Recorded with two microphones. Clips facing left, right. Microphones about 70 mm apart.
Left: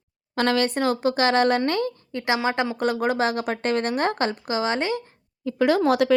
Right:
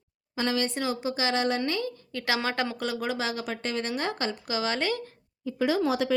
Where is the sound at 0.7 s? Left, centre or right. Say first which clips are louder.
Left 7 dB; left.